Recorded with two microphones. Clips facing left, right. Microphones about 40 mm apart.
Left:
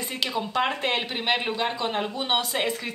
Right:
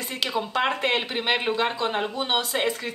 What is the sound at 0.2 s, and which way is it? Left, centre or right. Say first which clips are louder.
Speech: right 1 dB; centre.